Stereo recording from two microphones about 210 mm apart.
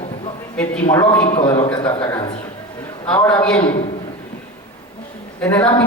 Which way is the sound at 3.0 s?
5° left (ahead or behind).